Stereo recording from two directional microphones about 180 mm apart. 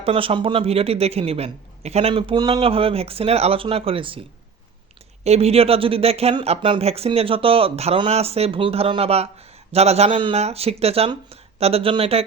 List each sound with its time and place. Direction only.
0.0 s a man's voice: 30° right (ahead or behind)
5.2 s a man's voice: 35° right (ahead or behind)